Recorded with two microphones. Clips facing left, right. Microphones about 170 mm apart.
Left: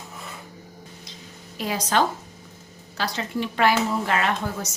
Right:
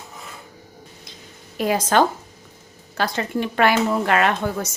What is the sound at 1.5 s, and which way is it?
Speech, 55° right (ahead or behind).